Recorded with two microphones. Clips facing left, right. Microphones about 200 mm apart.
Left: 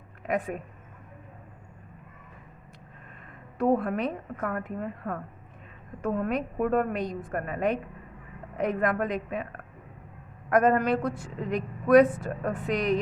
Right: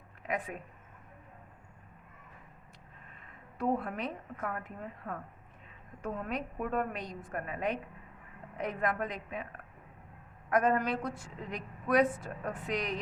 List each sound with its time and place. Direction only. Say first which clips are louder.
0.3 s speech: left 7 dB; 50° left (ahead or behind)
3.6 s a woman's voice: left 8 dB; 60° left (ahead or behind)
10.5 s a woman's voice: left 6 dB; 60° left (ahead or behind)